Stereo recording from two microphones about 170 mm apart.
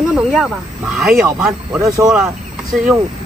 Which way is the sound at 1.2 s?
15° right (ahead or behind).